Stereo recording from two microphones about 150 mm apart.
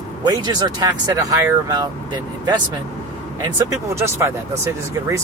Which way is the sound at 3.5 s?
20° right (ahead or behind).